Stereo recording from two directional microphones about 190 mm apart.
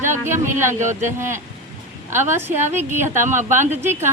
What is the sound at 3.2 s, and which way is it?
Speech, 40° right (ahead or behind).